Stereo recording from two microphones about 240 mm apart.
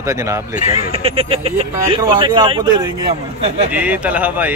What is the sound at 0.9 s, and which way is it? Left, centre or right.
Speech, right.